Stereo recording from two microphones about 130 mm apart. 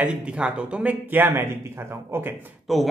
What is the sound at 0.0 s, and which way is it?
A man's voice, 10° right (ahead or behind).